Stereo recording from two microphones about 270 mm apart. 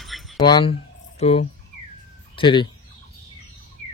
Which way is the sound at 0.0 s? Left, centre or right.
Centre.